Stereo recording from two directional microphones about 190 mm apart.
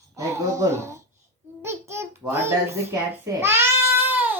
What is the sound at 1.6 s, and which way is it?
Babbling, 15° right (ahead or behind).